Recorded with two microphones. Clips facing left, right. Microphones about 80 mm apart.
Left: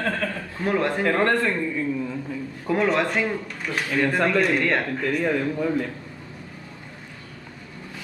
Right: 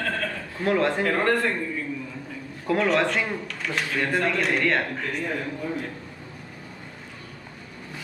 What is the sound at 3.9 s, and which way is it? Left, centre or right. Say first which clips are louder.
Speech: left 4 dB; left.